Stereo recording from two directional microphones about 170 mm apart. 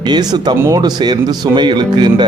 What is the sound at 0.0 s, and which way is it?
Speech, 25° right (ahead or behind).